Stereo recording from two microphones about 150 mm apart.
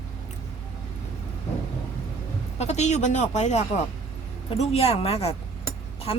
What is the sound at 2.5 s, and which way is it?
Speech, 50° left (ahead or behind).